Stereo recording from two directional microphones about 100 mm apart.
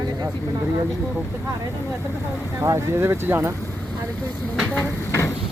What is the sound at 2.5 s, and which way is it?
Speech, 30° right (ahead or behind).